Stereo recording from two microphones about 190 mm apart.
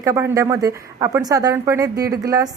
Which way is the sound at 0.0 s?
15° right (ahead or behind).